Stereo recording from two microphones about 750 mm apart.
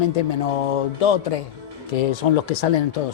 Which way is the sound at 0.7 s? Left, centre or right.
Left.